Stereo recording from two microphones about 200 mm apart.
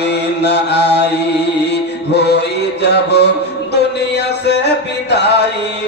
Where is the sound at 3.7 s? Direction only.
55° left (ahead or behind).